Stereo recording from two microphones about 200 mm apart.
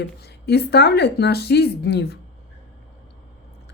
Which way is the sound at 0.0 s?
55° left (ahead or behind).